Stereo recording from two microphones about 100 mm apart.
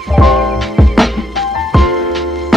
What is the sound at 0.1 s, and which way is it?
Music, centre (ahead or behind).